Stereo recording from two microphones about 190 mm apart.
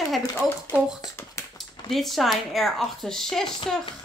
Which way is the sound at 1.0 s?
15° left (ahead or behind).